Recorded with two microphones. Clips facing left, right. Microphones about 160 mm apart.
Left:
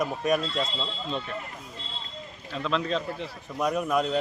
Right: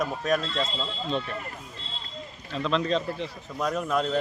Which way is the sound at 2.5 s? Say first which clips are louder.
Right 2 dB; 5° left (ahead or behind).